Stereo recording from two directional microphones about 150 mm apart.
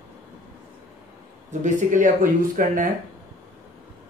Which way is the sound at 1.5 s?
55° right (ahead or behind).